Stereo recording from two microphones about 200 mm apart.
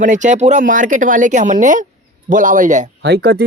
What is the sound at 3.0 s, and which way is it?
Speech, 55° right (ahead or behind).